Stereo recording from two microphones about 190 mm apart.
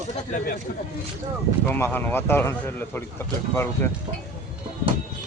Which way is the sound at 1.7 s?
10° left (ahead or behind).